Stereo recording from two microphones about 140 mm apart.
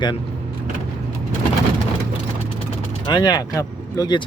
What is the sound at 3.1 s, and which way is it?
Speech, 30° left (ahead or behind).